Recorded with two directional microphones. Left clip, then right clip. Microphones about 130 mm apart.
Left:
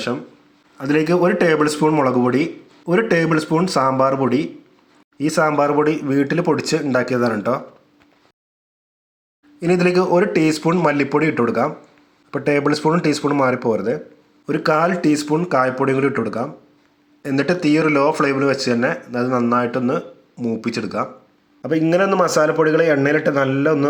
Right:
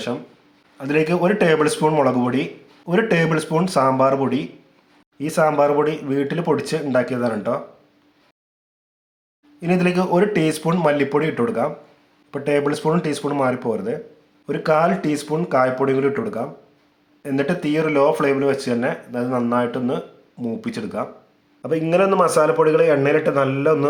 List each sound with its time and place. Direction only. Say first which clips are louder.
0.8 s speech: left 2 dB; 15° left (ahead or behind)
9.6 s speech: left 4 dB; 25° left (ahead or behind)